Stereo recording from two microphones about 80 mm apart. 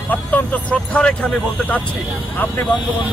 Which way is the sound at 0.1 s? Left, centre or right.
Left.